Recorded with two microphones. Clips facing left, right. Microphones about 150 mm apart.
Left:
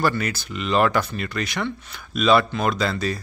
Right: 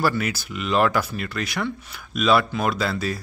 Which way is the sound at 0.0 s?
5° right (ahead or behind).